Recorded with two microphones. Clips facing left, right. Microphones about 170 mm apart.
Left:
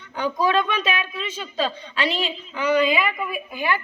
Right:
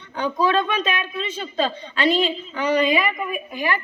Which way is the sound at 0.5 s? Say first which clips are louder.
Right 1 dB; 35° right (ahead or behind).